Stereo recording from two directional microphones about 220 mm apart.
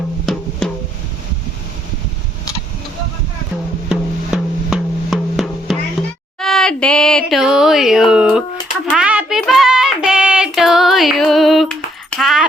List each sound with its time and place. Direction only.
0.6 s music: 5° left (ahead or behind)
3.8 s drum: 5° right (ahead or behind)
6.4 s a sound: centre (ahead or behind)
8.9 s coin: 5° right (ahead or behind)
9.4 s music: centre (ahead or behind)